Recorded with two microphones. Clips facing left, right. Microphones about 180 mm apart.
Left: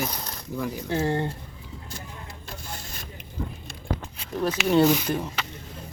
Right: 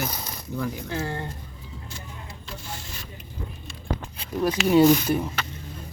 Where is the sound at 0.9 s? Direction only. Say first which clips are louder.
Left 5 dB; 25° left (ahead or behind).